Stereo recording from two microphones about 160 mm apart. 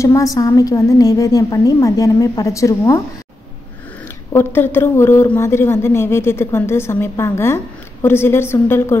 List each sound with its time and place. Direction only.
0.0 s a woman's voice: 20° left (ahead or behind)
4.3 s a woman's voice: 15° left (ahead or behind)